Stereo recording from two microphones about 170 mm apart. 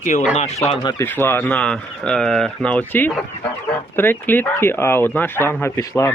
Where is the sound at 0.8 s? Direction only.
15° left (ahead or behind).